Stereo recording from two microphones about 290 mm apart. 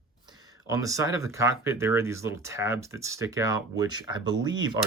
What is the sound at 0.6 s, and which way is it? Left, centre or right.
Speech, centre.